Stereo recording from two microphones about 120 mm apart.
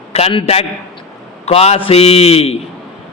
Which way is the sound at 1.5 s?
55° left (ahead or behind).